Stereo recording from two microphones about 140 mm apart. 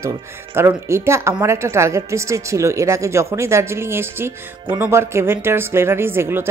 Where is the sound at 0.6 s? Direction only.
20° right (ahead or behind).